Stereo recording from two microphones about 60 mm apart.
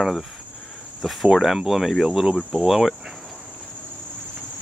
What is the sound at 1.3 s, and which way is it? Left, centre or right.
Speech, centre.